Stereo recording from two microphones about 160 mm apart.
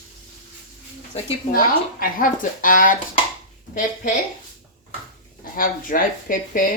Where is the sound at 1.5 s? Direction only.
65° left (ahead or behind).